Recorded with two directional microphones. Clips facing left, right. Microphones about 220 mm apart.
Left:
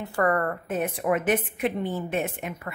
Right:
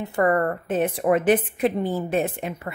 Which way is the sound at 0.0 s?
20° right (ahead or behind).